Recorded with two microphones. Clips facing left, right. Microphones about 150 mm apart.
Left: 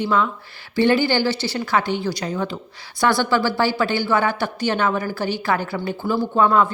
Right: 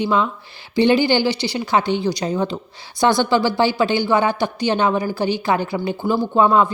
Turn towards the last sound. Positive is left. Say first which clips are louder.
# right 2 dB
turn(degrees=-20)  # may be behind; listen again after turning